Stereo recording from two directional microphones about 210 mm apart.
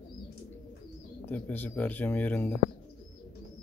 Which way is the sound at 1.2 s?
10° left (ahead or behind).